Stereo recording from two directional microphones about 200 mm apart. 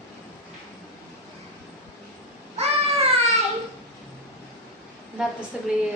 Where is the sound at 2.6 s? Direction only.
35° right (ahead or behind).